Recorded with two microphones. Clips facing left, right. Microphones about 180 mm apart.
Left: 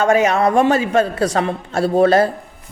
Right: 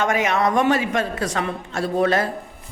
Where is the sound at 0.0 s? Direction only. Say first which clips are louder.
Left 6 dB; 30° left (ahead or behind).